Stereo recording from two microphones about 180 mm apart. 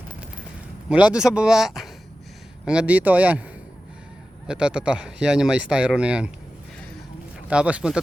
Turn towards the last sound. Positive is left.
turn(degrees=-5)  # may be behind; listen again after turning